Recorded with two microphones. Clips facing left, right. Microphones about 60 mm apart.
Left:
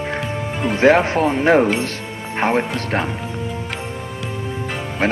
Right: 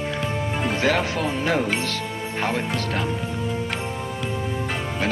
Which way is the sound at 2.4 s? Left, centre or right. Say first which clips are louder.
Left 7 dB; left.